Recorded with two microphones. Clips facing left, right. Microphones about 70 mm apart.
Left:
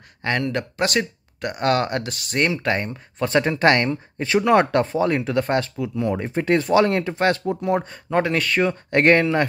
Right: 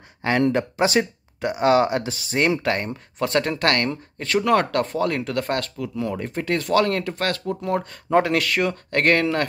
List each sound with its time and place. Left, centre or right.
0.5 s speech: centre
8.1 s speech: centre
8.9 s speech: centre